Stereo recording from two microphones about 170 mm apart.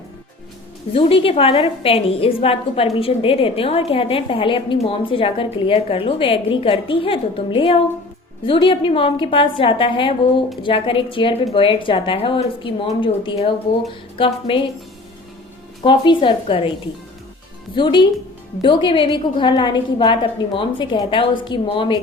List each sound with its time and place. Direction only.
0.9 s a woman's voice: 35° left (ahead or behind)
15.8 s a woman's voice: 30° left (ahead or behind)
17.7 s a woman's voice: 25° left (ahead or behind)